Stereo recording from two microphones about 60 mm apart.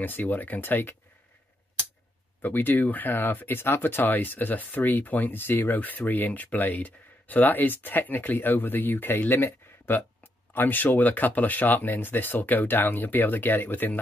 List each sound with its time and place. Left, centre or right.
0.0 s speech: left
2.4 s speech: left
5.8 s speech: left